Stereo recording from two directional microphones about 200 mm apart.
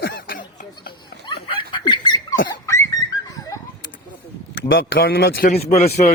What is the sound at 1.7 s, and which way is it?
Dog, 25° left (ahead or behind).